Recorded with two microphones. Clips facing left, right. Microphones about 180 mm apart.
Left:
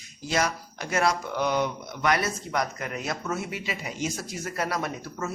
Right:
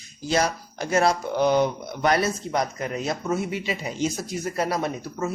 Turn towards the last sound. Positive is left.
turn(degrees=-25)  # may be behind; listen again after turning